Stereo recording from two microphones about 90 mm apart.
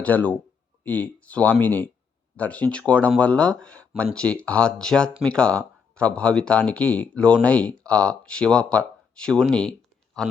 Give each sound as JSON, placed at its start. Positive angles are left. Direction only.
{"t": 0.0, "sound": "speech", "side_deg": 15}